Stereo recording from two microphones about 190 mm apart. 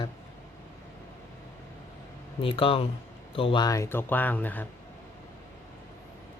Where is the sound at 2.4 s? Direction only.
30° left (ahead or behind); by 4.6 s 10° left (ahead or behind).